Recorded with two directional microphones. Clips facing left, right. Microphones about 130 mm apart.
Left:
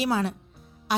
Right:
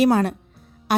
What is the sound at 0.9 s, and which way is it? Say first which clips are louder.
Music: right 6 dB; 55° right (ahead or behind).